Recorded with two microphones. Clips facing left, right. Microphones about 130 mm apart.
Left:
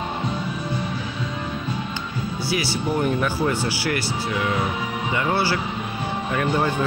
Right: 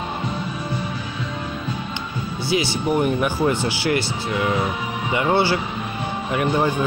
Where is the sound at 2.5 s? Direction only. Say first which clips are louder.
Right 4 dB; 20° right (ahead or behind).